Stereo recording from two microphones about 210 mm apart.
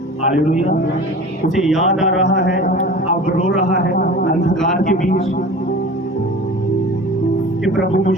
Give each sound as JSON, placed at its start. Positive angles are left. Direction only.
{"t": 0.3, "sound": "speech", "side_deg": 35}
{"t": 1.6, "sound": "speech", "side_deg": 0}
{"t": 2.4, "sound": "speech", "side_deg": 50}
{"t": 3.2, "sound": "speech", "side_deg": 35}
{"t": 3.8, "sound": "speech", "side_deg": 45}
{"t": 7.8, "sound": "speech", "side_deg": 45}